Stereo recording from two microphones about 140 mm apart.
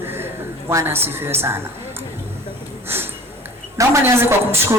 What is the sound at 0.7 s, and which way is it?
Speech, 20° right (ahead or behind).